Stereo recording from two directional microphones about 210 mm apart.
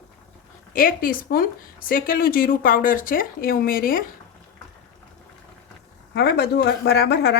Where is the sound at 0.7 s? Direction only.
40° left (ahead or behind).